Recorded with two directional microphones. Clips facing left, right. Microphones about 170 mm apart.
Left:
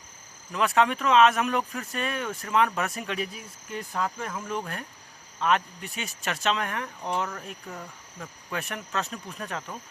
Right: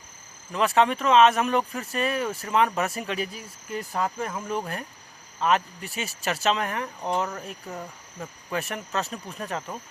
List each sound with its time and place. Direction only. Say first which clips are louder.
0.5 s speech: right 2 dB; centre (ahead or behind)
7.7 s speech: right 3 dB; 20° right (ahead or behind)
8.4 s speech: right 3 dB; centre (ahead or behind)